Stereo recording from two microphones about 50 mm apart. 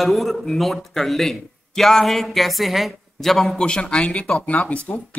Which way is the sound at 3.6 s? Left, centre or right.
Centre.